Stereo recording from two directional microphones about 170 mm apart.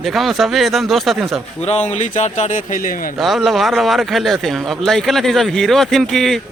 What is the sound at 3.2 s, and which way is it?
Speech, centre (ahead or behind).